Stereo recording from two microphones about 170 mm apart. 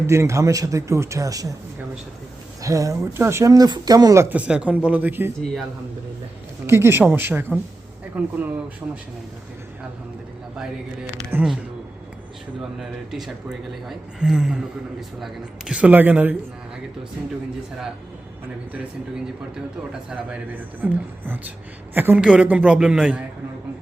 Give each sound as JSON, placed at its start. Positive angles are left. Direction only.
{"t": 0.1, "sound": "speech", "side_deg": -15}
{"t": 2.6, "sound": "speech", "side_deg": -20}
{"t": 6.7, "sound": "speech", "side_deg": -15}
{"t": 11.3, "sound": "speech", "side_deg": -5}
{"t": 12.8, "sound": "speech", "side_deg": 0}
{"t": 19.9, "sound": "speech", "side_deg": -5}